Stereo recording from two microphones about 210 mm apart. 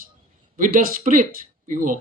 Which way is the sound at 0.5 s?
40° right (ahead or behind).